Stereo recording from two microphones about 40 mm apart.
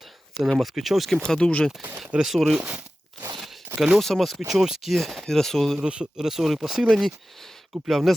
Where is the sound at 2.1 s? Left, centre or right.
Centre.